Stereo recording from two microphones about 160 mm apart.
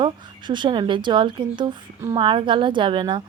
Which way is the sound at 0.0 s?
30° right (ahead or behind).